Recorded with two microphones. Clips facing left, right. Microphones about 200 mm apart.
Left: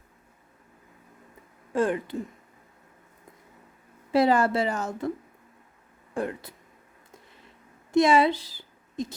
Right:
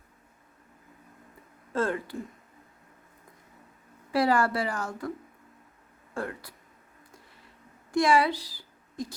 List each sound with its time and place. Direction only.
1.7 s speech: 15° left (ahead or behind)
4.1 s a woman's voice: 20° left (ahead or behind)
6.1 s a woman's voice: 20° left (ahead or behind)
7.9 s a woman's voice: 20° left (ahead or behind)